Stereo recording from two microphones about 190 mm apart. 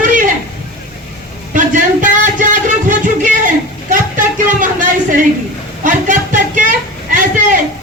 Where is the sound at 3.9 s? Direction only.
45° right (ahead or behind).